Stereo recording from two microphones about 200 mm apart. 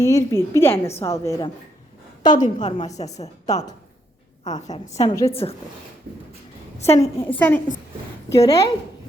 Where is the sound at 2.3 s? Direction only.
40° left (ahead or behind).